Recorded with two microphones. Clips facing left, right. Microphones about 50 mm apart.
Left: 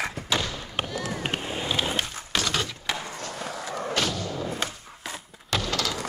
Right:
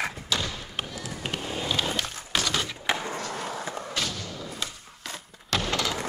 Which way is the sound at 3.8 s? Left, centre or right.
Left.